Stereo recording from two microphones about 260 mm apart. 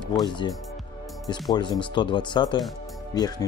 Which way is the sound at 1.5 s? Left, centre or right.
Centre.